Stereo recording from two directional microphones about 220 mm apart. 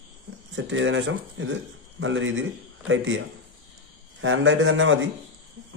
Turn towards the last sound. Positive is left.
turn(degrees=-60)  # may be behind; listen again after turning